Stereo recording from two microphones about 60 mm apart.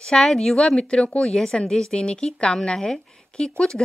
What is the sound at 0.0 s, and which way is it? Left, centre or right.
Speech, centre.